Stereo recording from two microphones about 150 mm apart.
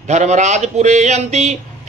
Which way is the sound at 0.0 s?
50° right (ahead or behind).